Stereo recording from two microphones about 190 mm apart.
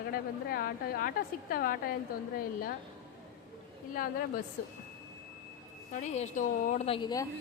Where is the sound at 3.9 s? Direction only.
50° left (ahead or behind).